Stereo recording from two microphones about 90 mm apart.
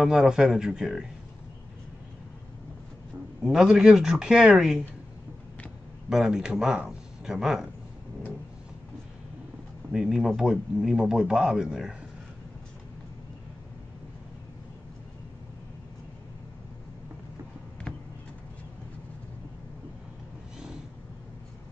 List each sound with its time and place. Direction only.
0.0 s speech: 5° right (ahead or behind)
3.4 s speech: 5° right (ahead or behind)
6.0 s speech: 5° right (ahead or behind)
9.9 s speech: 5° right (ahead or behind)
20.5 s vehicle: 5° right (ahead or behind)